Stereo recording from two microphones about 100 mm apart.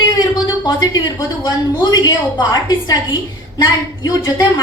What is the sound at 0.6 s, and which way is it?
A woman's voice, 40° left (ahead or behind).